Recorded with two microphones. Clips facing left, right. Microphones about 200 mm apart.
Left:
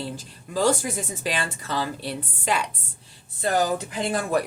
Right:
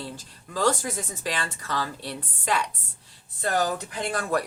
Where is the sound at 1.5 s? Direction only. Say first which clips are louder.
Left 2 dB; 25° left (ahead or behind).